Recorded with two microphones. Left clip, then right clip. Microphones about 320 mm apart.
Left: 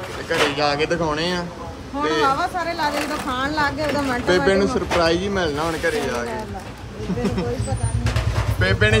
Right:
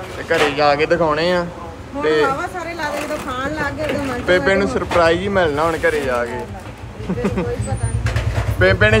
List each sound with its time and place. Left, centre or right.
0.3 s speech: centre
2.8 s speech: centre
3.8 s speech: centre
8.5 s speech: centre